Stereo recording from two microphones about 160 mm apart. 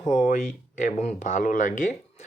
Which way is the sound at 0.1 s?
50° left (ahead or behind).